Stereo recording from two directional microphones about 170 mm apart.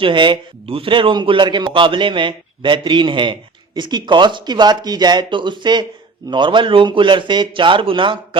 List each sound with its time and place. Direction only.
0.0 s a man's voice: 30° right (ahead or behind)